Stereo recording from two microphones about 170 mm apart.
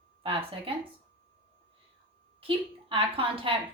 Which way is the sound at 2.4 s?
30° right (ahead or behind).